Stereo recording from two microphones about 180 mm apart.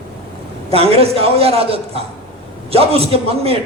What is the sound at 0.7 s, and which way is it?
A man's voice, 30° right (ahead or behind).